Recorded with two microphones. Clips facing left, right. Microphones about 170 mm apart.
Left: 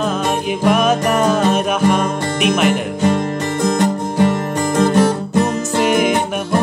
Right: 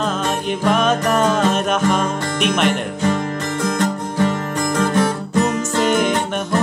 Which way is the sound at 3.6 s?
30° left (ahead or behind).